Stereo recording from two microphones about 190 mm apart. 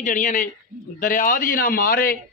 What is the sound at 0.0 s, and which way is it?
A man's voice, 40° left (ahead or behind).